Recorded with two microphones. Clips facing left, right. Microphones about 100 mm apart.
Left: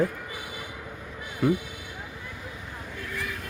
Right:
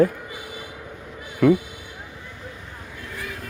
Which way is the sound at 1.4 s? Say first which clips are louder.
Right 8 dB; 90° right.